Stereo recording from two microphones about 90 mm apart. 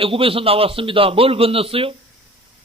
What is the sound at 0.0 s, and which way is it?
A man's voice, 90° right.